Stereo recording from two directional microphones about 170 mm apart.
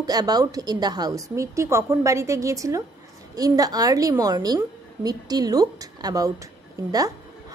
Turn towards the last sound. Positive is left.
turn(degrees=-20)  # may be behind; listen again after turning